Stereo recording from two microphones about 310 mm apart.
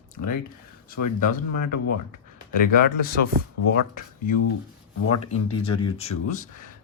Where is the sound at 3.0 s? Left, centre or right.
Left.